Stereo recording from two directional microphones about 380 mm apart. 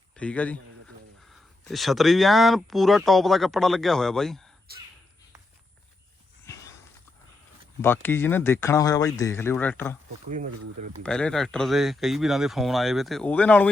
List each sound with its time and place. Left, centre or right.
0.2 s speech: centre
7.8 s speech: centre
10.2 s speech: centre
11.0 s speech: centre